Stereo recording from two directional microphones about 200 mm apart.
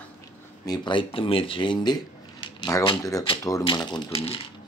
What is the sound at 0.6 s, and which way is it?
Speech, 20° left (ahead or behind).